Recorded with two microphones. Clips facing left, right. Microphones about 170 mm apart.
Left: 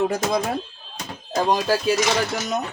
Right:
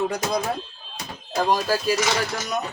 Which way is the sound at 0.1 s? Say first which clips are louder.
Left 3 dB; 25° left (ahead or behind).